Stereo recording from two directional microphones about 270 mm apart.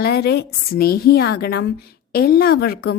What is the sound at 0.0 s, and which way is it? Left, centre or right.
A woman's voice, left.